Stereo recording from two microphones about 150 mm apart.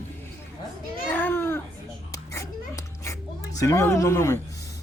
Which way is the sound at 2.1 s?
20° left (ahead or behind).